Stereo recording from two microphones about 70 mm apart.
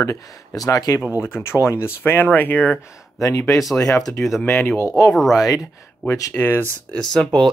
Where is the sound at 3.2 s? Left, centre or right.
Left.